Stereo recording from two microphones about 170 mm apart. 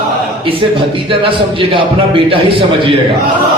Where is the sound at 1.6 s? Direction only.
30° right (ahead or behind).